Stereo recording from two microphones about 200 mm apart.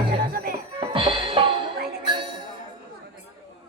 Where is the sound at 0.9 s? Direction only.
25° right (ahead or behind).